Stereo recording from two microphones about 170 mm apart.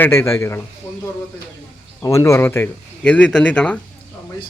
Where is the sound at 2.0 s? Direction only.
20° left (ahead or behind).